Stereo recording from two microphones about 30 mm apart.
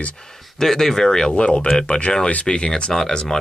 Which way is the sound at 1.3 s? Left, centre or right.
Left.